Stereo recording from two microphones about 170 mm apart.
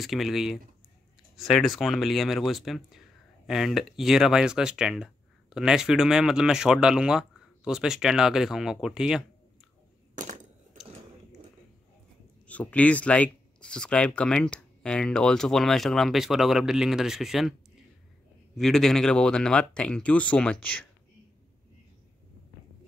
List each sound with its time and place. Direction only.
0.0 s speech: centre (ahead or behind)
10.1 s a sound: 45° right (ahead or behind)
12.4 s speech: 10° left (ahead or behind)
18.6 s speech: centre (ahead or behind)